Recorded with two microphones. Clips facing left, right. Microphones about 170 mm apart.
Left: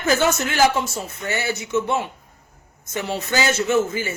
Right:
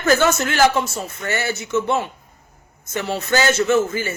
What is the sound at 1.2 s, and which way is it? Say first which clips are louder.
Speech: right 1 dB; 10° left (ahead or behind).